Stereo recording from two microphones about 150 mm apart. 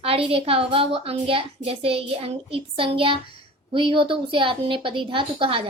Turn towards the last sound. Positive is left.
turn(degrees=-35)  # may be behind; listen again after turning